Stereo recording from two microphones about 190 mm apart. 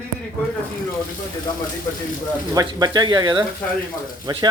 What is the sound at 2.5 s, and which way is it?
Speech, 20° right (ahead or behind).